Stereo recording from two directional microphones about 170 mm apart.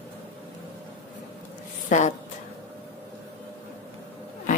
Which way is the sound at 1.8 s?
45° left (ahead or behind).